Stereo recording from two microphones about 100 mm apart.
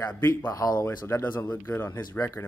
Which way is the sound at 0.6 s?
40° left (ahead or behind).